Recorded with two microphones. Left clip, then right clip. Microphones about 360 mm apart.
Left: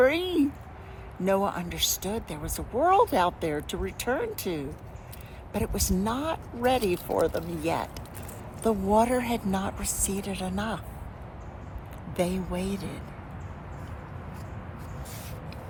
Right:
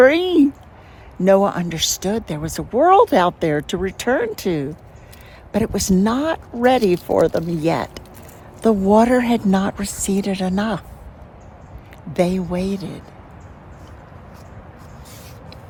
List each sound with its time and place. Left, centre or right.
0.0 s speech: right
12.1 s speech: right